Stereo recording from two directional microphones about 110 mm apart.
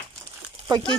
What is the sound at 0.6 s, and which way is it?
Speech, 40° right (ahead or behind).